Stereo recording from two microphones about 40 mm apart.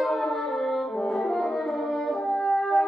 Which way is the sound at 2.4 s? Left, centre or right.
Centre.